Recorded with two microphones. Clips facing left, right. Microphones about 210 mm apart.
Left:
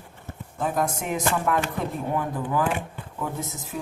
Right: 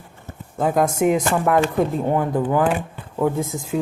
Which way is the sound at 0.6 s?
75° right (ahead or behind).